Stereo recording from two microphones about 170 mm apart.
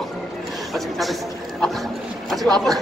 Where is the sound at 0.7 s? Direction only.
Centre (ahead or behind).